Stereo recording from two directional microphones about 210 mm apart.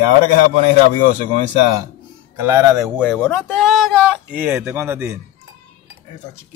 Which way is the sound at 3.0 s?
5° left (ahead or behind).